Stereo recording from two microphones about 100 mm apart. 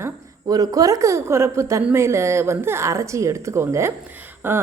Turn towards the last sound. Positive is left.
turn(degrees=-20)  # may be behind; listen again after turning